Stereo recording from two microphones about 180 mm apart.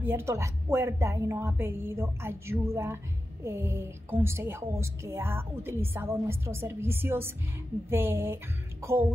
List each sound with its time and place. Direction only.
0.0 s a woman's voice: 15° right (ahead or behind)